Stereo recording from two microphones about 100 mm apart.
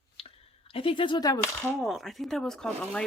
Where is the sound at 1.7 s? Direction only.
Centre (ahead or behind).